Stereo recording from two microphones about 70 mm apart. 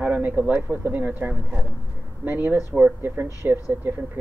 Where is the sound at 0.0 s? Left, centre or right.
Right.